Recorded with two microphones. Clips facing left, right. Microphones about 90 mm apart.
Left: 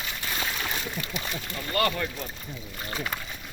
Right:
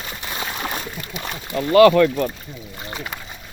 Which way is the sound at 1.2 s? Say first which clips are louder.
Right 9 dB; 60° right (ahead or behind).